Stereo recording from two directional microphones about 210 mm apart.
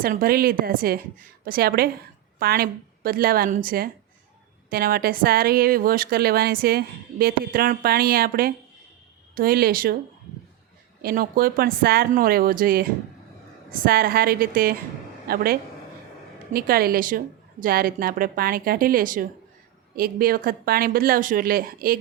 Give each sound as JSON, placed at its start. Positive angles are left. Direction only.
{"t": 0.0, "sound": "a woman's voice", "side_deg": -45}
{"t": 11.0, "sound": "a woman's voice", "side_deg": -45}
{"t": 16.5, "sound": "a woman's voice", "side_deg": -45}